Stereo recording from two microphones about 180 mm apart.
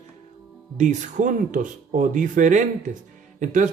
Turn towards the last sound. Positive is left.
turn(degrees=-45)  # may be behind; listen again after turning